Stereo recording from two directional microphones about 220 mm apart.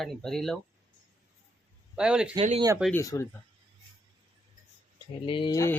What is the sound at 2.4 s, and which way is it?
Speech, 25° right (ahead or behind).